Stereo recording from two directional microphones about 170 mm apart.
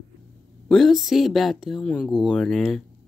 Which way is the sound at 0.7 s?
Centre (ahead or behind).